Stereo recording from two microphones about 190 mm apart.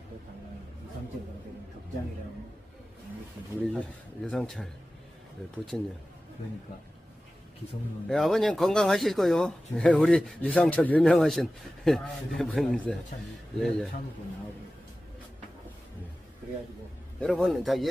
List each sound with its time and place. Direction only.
3.6 s speech: centre (ahead or behind)
5.7 s speech: centre (ahead or behind)
8.1 s speech: centre (ahead or behind)
17.2 s speech: 5° left (ahead or behind)